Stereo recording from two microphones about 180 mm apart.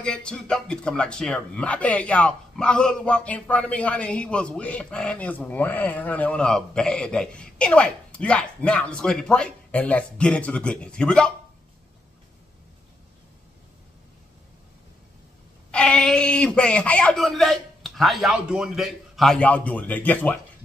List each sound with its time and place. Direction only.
0.0 s a man's voice: 5° left (ahead or behind)
15.7 s a man's voice: 5° left (ahead or behind)